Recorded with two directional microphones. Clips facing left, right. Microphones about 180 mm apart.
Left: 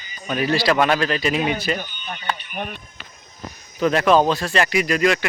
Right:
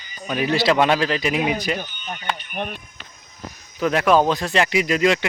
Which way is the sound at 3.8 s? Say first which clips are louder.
Left 1 dB; 10° right (ahead or behind).